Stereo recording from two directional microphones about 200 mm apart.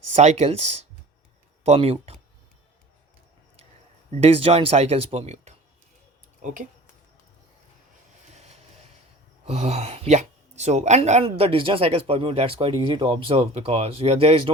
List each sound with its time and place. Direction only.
0.1 s speech: 35° right (ahead or behind)
4.1 s speech: 30° right (ahead or behind)
8.3 s vehicle: 35° right (ahead or behind)
9.5 s speech: 30° right (ahead or behind)